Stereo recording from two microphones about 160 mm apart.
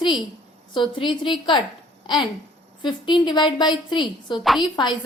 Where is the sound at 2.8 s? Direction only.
30° left (ahead or behind).